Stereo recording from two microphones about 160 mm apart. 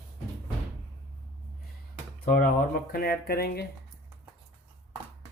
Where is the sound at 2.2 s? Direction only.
70° left (ahead or behind).